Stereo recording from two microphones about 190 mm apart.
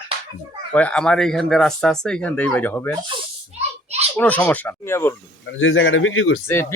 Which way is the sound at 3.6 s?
35° right (ahead or behind).